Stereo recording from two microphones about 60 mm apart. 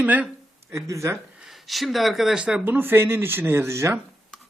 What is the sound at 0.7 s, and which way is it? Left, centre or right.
Speech, right.